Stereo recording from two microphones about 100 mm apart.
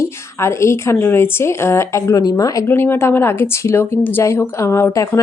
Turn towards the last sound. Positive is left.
turn(degrees=25)  # may be behind; listen again after turning